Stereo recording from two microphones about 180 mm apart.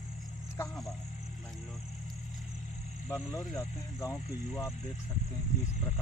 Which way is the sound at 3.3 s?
15° left (ahead or behind).